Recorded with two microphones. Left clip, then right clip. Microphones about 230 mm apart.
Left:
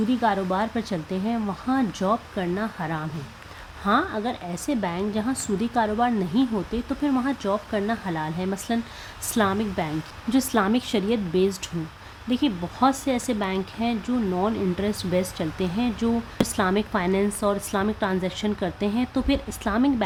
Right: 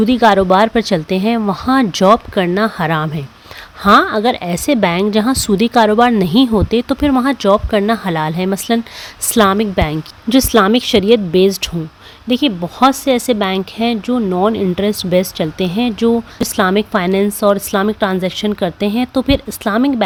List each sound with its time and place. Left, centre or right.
0.1 s a woman's voice: right